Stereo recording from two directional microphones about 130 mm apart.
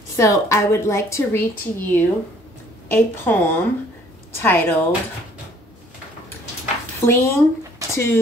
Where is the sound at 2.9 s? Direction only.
15° left (ahead or behind).